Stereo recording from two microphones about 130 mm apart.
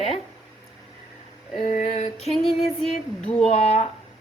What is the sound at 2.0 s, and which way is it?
Speech, 50° left (ahead or behind).